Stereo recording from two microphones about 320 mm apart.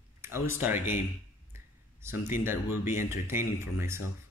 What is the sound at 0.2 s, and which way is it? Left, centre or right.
Speech, centre.